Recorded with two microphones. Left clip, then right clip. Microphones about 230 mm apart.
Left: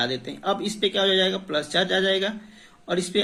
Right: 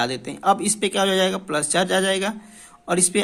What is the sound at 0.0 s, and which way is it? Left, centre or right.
Speech, right.